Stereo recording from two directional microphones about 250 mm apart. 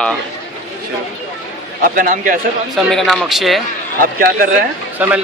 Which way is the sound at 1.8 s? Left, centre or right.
Right.